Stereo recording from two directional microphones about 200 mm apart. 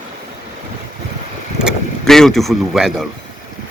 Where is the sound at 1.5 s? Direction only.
Centre (ahead or behind).